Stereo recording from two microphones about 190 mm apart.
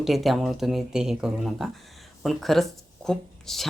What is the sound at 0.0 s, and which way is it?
Speech, centre (ahead or behind).